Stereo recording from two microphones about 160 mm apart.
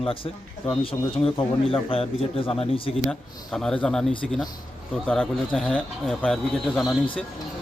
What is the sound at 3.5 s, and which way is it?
Speech, 5° left (ahead or behind).